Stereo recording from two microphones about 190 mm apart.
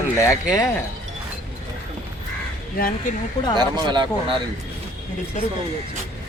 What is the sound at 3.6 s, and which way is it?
Speech, 25° right (ahead or behind).